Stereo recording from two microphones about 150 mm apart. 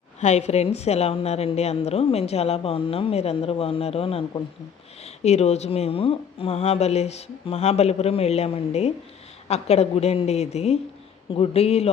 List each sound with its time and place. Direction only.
0.2 s a woman's voice: 50° left (ahead or behind)